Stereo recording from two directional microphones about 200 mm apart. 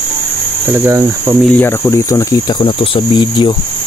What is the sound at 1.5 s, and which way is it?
Cricket, 10° left (ahead or behind).